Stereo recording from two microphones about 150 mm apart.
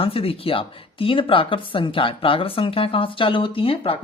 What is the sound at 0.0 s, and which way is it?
Speech, 40° left (ahead or behind).